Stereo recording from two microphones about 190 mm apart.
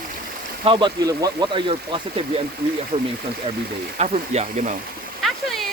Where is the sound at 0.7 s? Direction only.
25° right (ahead or behind).